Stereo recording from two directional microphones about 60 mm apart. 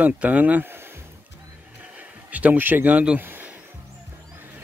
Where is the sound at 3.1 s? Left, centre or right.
Right.